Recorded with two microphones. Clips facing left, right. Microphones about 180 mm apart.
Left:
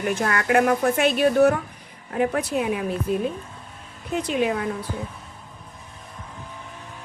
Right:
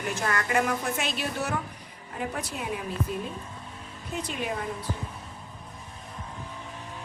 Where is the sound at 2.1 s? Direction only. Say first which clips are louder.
Left 11 dB; 85° left.